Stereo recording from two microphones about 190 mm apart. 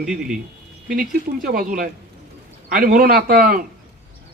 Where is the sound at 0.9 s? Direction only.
45° right (ahead or behind).